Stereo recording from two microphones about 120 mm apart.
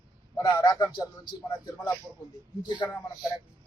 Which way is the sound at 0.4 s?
35° left (ahead or behind).